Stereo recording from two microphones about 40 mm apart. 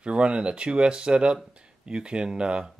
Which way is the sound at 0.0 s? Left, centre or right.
Right.